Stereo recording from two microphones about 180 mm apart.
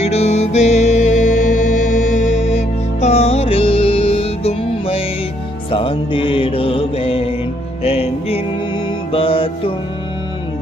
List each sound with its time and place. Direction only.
0.0 s music: 35° left (ahead or behind)
5.7 s mantra: 30° left (ahead or behind)
7.9 s music: 35° left (ahead or behind)